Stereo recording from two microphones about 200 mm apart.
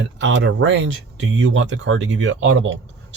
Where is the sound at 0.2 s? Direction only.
65° right (ahead or behind).